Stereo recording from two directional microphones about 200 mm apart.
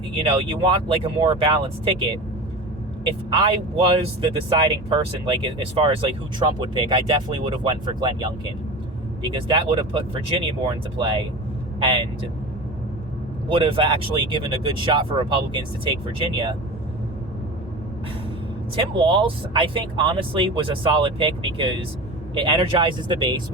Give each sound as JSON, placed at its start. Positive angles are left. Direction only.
{"t": 0.2, "sound": "speech", "side_deg": -25}
{"t": 3.2, "sound": "speech", "side_deg": -25}
{"t": 13.5, "sound": "speech", "side_deg": -25}
{"t": 18.8, "sound": "speech", "side_deg": -25}